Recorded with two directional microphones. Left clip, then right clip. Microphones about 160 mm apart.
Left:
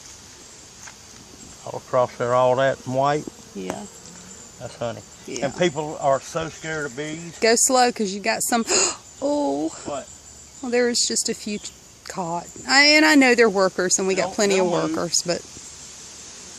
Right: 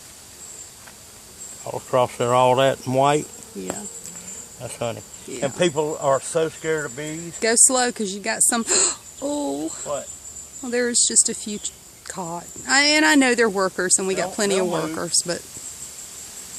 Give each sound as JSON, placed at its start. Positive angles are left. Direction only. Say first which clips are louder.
{"t": 1.9, "sound": "speech", "louder": "right 1 dB", "side_deg": -55}
{"t": 4.6, "sound": "speech", "louder": "right 1 dB", "side_deg": -40}
{"t": 7.3, "sound": "speech", "louder": "left 2 dB", "side_deg": 10}